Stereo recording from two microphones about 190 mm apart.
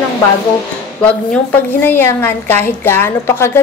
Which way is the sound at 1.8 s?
10° left (ahead or behind).